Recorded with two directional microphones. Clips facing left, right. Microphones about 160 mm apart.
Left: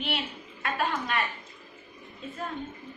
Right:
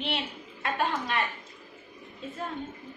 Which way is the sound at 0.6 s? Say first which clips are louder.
Even; 25° right (ahead or behind).